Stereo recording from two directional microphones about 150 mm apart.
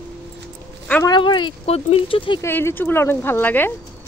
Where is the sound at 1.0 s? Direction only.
30° left (ahead or behind).